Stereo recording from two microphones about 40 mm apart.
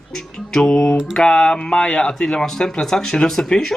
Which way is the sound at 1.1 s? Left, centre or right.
Left.